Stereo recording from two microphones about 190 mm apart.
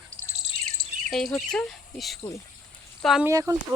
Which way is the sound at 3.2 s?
15° right (ahead or behind).